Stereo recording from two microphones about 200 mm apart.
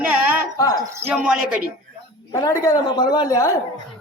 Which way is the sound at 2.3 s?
15° left (ahead or behind).